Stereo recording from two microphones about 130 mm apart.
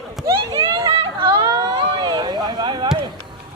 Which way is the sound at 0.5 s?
35° right (ahead or behind).